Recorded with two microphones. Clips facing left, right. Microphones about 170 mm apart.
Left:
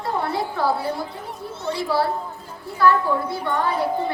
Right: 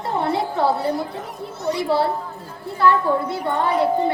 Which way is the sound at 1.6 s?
30° left (ahead or behind).